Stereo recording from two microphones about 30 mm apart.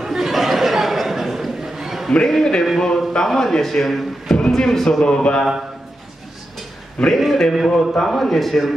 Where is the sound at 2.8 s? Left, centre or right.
Left.